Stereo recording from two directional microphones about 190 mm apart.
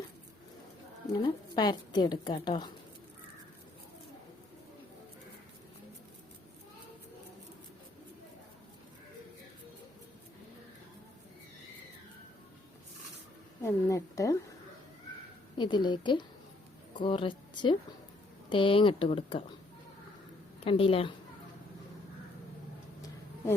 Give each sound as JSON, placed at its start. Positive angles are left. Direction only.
{"t": 1.1, "sound": "a woman's voice", "side_deg": 25}
{"t": 13.6, "sound": "a woman's voice", "side_deg": 15}
{"t": 15.5, "sound": "a woman's voice", "side_deg": 25}
{"t": 20.7, "sound": "a woman's voice", "side_deg": 30}